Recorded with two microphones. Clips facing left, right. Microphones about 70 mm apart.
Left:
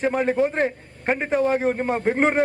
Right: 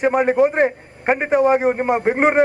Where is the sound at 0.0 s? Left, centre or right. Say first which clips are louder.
Right 5 dB; centre.